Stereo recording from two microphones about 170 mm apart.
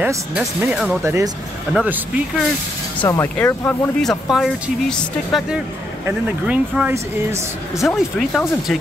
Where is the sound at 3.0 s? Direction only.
15° left (ahead or behind); by 7.5 s 15° right (ahead or behind).